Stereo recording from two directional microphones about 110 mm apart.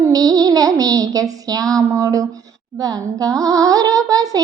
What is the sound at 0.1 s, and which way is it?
Singing, 35° right (ahead or behind).